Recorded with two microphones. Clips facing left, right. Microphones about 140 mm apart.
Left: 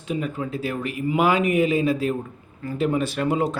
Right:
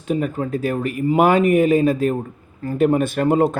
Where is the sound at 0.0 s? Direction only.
45° right (ahead or behind).